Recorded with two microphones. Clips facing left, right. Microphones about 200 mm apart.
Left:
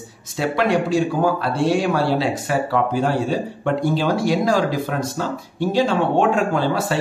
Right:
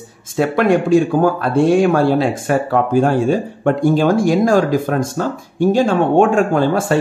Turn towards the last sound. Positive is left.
turn(degrees=-50)  # may be behind; listen again after turning